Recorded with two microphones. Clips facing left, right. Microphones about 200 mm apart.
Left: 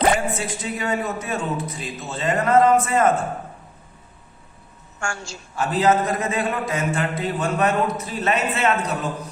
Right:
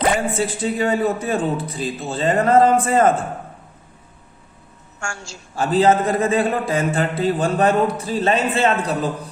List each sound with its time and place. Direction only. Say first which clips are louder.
0.3 s a man's voice: right 7 dB; 30° right (ahead or behind)
4.9 s a woman's voice: left 2 dB; 60° left (ahead or behind)
5.5 s a man's voice: right 3 dB; 30° right (ahead or behind)